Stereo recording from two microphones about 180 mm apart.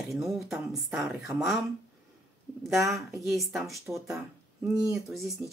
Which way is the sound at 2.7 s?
15° right (ahead or behind).